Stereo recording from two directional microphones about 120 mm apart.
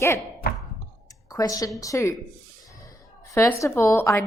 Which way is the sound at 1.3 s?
30° left (ahead or behind).